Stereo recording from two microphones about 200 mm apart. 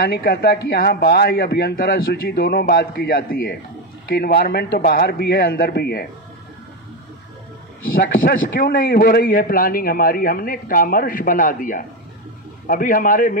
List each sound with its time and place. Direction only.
0.0 s a man's voice: 50° left (ahead or behind)
7.9 s a man's voice: 45° left (ahead or behind)